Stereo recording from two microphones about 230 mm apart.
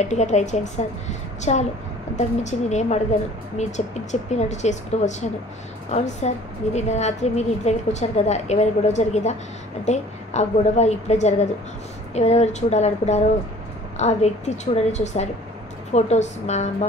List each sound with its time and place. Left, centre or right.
0.0 s a woman's voice: left